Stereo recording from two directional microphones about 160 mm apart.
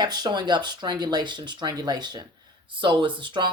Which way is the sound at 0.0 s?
25° right (ahead or behind).